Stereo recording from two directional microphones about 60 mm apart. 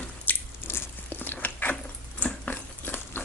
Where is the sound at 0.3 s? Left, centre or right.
Left.